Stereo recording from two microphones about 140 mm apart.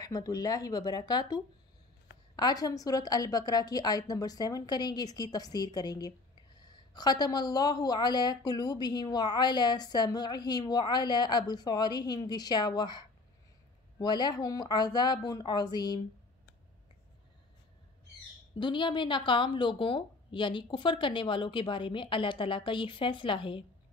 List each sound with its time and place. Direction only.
0.0 s a woman's voice: 25° left (ahead or behind)
18.6 s speech: 35° left (ahead or behind)